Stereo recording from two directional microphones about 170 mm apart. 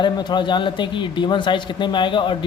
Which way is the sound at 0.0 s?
25° left (ahead or behind).